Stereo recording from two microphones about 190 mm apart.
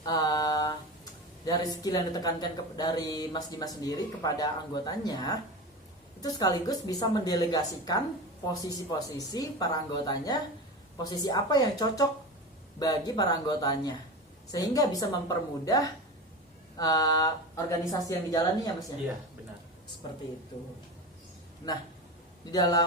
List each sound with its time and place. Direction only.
0.0 s mantra: 20° left (ahead or behind)
1.5 s speech: 20° left (ahead or behind)
22.5 s speech: 20° left (ahead or behind)